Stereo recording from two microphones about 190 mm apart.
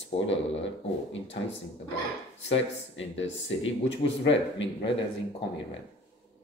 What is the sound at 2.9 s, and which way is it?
Speech, 80° left.